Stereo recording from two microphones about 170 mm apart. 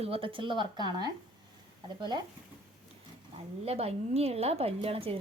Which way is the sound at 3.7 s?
35° right (ahead or behind).